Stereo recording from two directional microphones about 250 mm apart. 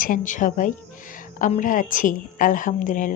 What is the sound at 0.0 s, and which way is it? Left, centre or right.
A woman's voice, left.